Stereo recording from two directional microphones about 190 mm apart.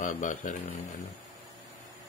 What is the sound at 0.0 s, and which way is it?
Speech, 40° left (ahead or behind).